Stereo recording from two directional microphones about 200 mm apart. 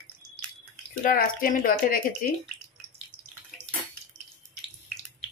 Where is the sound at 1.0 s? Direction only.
45° left (ahead or behind).